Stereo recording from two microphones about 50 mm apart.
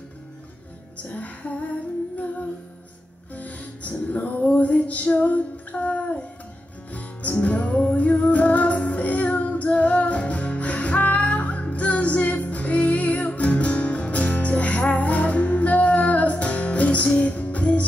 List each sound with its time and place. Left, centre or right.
0.9 s music: left
3.3 s music: left
4.1 s female singing: left
6.9 s music: left